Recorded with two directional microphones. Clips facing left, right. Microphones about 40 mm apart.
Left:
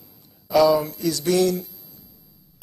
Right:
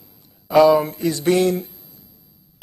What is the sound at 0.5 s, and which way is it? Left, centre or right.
Speech, right.